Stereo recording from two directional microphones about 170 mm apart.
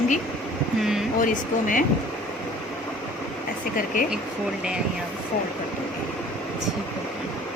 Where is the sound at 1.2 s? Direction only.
50° left (ahead or behind).